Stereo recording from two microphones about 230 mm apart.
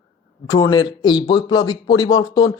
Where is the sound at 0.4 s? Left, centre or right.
Centre.